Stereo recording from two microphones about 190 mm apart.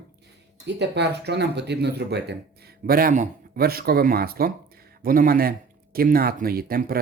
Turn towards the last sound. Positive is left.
turn(degrees=-50)  # may be behind; listen again after turning